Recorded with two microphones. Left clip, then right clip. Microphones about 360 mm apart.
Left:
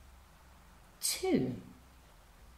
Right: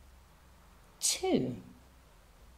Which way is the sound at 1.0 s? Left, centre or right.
Centre.